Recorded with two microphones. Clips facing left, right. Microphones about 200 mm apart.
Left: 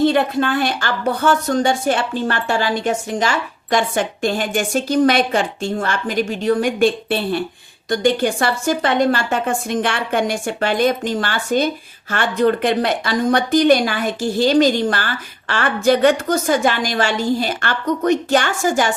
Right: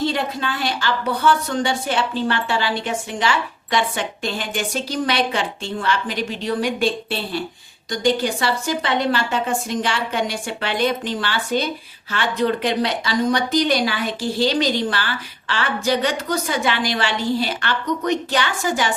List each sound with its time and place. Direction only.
0.0 s a woman's voice: 55° left (ahead or behind)